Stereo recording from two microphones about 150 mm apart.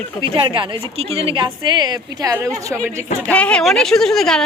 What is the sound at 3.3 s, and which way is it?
Speech, 10° left (ahead or behind).